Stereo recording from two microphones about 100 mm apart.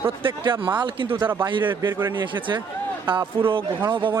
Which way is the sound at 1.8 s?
25° right (ahead or behind).